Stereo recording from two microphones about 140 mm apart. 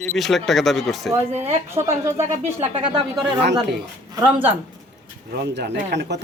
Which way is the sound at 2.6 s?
35° right (ahead or behind).